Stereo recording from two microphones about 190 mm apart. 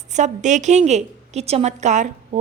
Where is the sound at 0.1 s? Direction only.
40° right (ahead or behind).